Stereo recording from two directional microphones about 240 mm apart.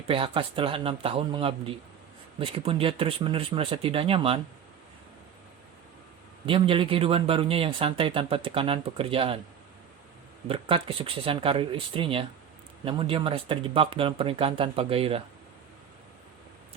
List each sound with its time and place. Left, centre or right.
0.1 s speech: right
6.4 s speech: right
10.5 s speech: right